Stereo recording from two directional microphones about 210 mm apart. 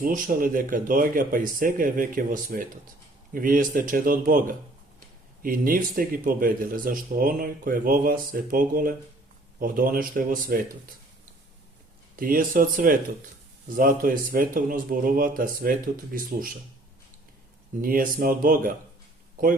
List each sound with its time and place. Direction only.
0.0 s speech: 40° right (ahead or behind)
12.2 s speech: 40° right (ahead or behind)
17.7 s speech: 40° right (ahead or behind)